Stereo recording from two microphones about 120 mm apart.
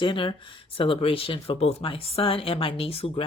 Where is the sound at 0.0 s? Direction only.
45° left (ahead or behind).